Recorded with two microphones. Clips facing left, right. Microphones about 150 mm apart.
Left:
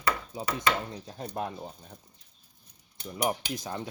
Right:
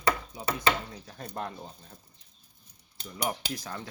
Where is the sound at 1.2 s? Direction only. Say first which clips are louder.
Left 3 dB; 15° left (ahead or behind).